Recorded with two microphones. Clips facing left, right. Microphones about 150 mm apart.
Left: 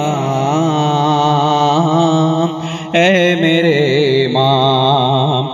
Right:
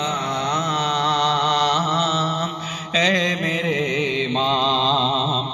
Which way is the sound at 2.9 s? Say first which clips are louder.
Left 11 dB; 70° left (ahead or behind).